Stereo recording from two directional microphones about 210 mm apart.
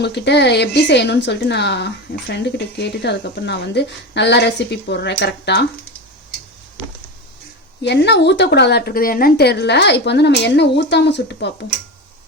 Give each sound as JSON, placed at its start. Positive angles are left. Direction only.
{"t": 0.0, "sound": "speech", "side_deg": 55}
{"t": 7.8, "sound": "speech", "side_deg": 55}